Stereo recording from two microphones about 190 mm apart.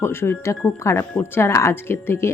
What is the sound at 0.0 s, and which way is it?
A woman's voice, 15° left (ahead or behind).